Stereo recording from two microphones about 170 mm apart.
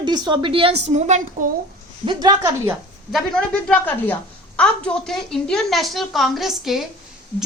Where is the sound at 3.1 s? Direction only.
5° left (ahead or behind).